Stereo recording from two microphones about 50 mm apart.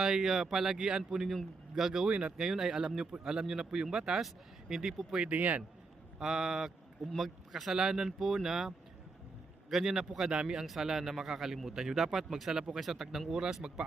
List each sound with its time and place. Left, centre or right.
0.0 s a man's voice: centre
2.0 s a man's voice: right
5.3 s a man's voice: right
6.1 s a man's voice: centre